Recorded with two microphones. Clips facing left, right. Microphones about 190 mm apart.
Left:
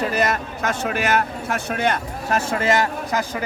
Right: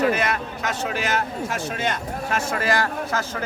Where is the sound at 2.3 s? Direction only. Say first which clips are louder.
Left 4 dB; 35° left (ahead or behind).